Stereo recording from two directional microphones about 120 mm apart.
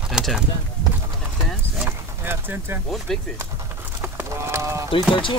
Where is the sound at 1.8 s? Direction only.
15° right (ahead or behind).